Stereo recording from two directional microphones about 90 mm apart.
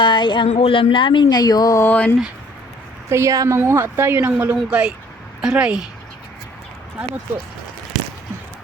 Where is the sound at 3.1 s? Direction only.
35° right (ahead or behind).